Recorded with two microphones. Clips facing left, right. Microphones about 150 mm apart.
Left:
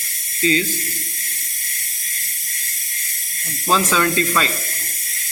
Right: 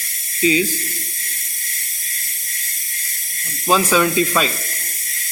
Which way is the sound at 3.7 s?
10° right (ahead or behind).